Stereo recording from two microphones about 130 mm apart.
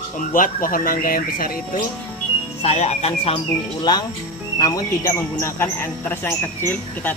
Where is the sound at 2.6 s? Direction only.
55° left (ahead or behind).